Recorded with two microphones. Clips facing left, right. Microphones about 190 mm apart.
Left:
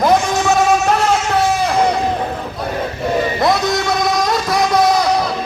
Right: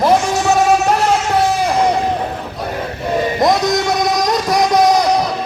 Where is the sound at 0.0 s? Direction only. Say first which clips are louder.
Even; 5° right (ahead or behind).